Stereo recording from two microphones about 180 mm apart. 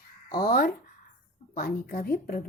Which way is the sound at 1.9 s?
55° left (ahead or behind).